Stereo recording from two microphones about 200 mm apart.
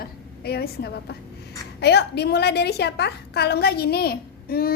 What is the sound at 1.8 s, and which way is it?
A woman's voice, 55° left (ahead or behind).